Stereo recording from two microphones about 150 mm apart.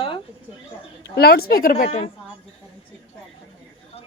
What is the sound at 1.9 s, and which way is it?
Speech, 45° left (ahead or behind).